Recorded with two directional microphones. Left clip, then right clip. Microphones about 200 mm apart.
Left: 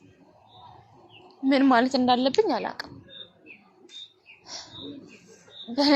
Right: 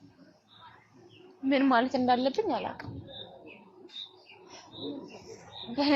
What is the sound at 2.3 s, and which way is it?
Speech, 50° left (ahead or behind).